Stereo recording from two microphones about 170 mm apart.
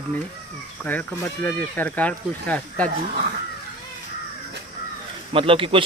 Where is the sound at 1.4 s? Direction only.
10° left (ahead or behind).